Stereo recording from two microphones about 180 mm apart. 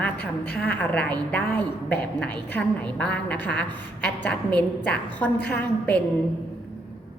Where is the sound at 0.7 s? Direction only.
10° left (ahead or behind).